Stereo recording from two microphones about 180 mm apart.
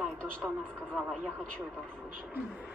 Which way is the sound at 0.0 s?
5° left (ahead or behind).